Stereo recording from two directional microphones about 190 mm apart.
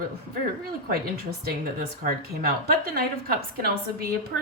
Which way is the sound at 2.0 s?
50° right (ahead or behind).